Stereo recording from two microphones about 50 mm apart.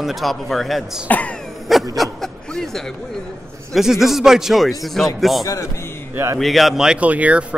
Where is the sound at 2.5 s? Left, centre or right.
Centre.